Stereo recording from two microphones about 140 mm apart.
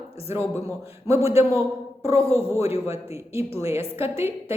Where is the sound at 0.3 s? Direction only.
20° right (ahead or behind).